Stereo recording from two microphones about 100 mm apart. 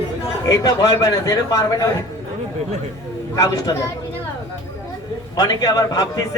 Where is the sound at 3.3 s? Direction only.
35° left (ahead or behind).